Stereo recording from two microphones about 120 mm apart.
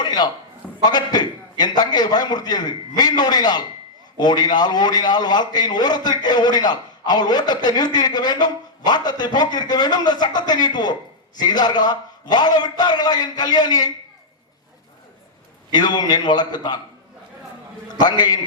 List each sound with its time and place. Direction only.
0.0 s a sound: 35° left (ahead or behind)
0.9 s a man's voice: 35° left (ahead or behind)
15.7 s a man's voice: 35° left (ahead or behind)
18.0 s a man's voice: 35° left (ahead or behind)